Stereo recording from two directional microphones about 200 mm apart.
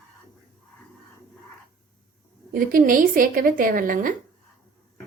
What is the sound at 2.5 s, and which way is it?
A woman's voice, 45° right (ahead or behind).